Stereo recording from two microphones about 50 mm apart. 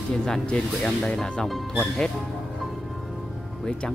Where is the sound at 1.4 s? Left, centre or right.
Centre.